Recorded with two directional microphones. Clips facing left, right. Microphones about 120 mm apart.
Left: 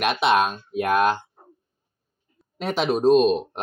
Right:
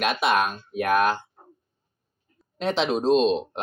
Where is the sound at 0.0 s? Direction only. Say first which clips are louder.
Left 2 dB; 25° left (ahead or behind).